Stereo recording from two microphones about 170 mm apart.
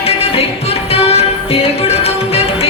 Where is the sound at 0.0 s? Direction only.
35° left (ahead or behind).